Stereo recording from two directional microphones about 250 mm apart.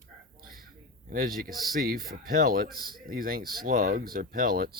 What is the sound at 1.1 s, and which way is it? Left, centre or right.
Speech, right.